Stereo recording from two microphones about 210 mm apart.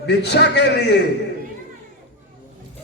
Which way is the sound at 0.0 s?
55° left (ahead or behind).